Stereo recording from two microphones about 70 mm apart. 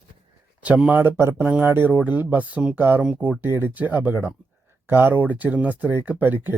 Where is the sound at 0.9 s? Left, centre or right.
Right.